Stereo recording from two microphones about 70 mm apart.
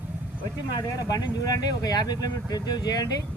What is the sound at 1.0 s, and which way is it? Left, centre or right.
Speech, left.